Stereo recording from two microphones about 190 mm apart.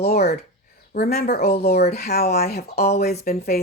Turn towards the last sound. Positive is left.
turn(degrees=55)  # may be behind; listen again after turning